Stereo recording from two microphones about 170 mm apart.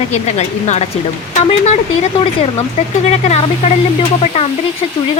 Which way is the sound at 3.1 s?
40° left (ahead or behind).